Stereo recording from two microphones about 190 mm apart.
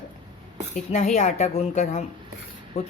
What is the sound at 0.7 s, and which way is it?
A woman's voice, 35° left (ahead or behind).